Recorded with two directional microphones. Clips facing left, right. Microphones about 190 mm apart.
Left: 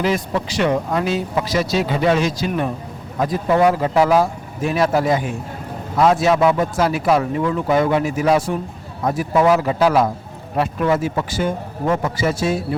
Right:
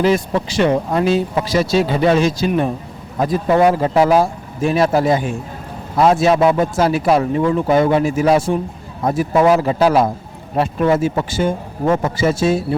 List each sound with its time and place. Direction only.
0.0 s speech: 30° right (ahead or behind)